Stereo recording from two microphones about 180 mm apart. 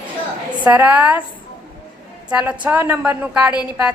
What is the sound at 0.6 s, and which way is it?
Speech, 10° right (ahead or behind).